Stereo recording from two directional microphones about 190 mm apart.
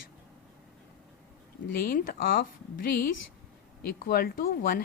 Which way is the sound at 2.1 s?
50° left (ahead or behind).